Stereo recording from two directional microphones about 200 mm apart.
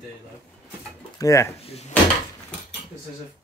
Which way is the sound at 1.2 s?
15° left (ahead or behind).